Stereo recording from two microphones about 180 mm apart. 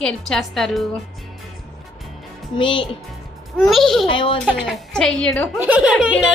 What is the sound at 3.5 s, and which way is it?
Speech, centre (ahead or behind).